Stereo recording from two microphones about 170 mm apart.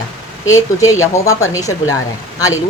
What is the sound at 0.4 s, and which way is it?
Speech, 20° left (ahead or behind).